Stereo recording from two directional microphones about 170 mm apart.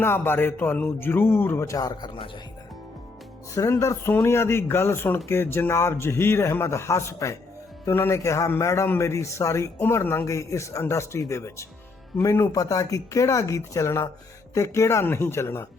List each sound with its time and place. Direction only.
0.0 s speech: 15° left (ahead or behind); by 2.3 s 30° left (ahead or behind)
3.5 s speech: 20° left (ahead or behind)